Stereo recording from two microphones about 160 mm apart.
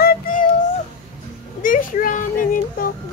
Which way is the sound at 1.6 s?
60° left (ahead or behind).